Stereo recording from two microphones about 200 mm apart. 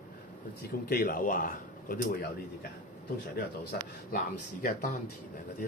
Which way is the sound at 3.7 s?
50° left (ahead or behind).